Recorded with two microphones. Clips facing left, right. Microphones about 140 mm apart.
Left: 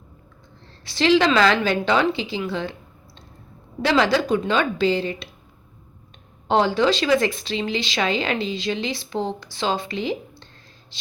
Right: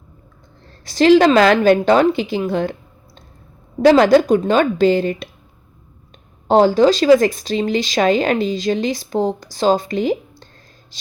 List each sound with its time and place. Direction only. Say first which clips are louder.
0.9 s a woman's voice: right 7 dB; 45° right (ahead or behind)
3.8 s a woman's voice: right 9 dB; 45° right (ahead or behind)
6.5 s speech: right 7 dB; 40° right (ahead or behind)